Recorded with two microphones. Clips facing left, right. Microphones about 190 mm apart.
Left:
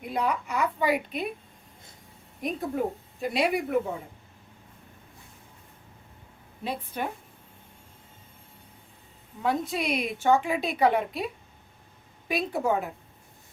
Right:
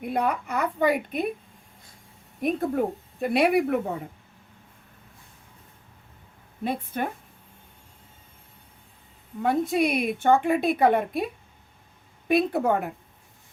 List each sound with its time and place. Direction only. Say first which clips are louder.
0.0 s a woman's voice: right 2 dB; 55° right (ahead or behind)
2.4 s speech: right 4 dB; 55° right (ahead or behind)
6.7 s a woman's voice: right 3 dB; 50° right (ahead or behind)
9.4 s a woman's voice: right 5 dB; 55° right (ahead or behind)
12.3 s speech: right 5 dB; 60° right (ahead or behind)